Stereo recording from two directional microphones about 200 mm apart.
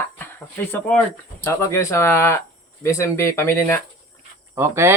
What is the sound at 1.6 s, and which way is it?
Speech, 15° left (ahead or behind).